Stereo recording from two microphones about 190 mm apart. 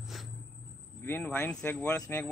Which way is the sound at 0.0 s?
Centre (ahead or behind).